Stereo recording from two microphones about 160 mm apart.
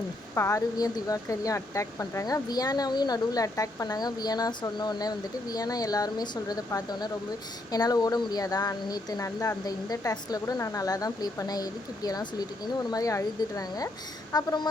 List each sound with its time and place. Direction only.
0.3 s speech: 20° left (ahead or behind)